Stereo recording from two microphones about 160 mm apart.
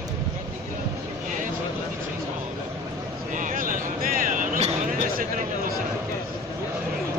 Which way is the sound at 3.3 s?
55° right (ahead or behind).